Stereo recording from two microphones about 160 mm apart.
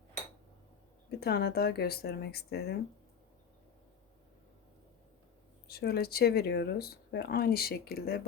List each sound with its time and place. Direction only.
1.2 s speech: 80° left
5.6 s speech: 80° left